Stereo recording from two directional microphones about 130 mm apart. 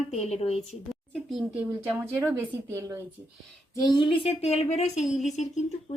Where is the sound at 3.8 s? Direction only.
35° left (ahead or behind); by 5.0 s 55° left (ahead or behind).